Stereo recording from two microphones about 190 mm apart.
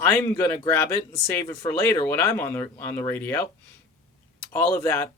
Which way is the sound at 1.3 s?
15° left (ahead or behind).